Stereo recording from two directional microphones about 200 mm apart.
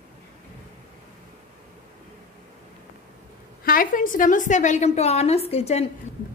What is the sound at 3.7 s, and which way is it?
A woman's voice, 45° left (ahead or behind).